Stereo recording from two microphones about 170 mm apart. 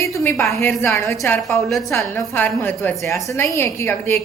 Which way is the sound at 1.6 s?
Centre (ahead or behind).